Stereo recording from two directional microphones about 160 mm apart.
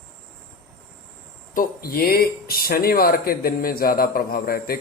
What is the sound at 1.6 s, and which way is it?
Speech, 65° left (ahead or behind).